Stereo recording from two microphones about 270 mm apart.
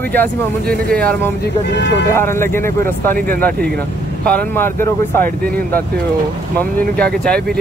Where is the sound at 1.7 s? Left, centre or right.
Left.